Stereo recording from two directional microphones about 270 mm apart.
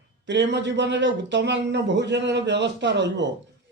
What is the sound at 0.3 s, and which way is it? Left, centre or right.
Speech, right.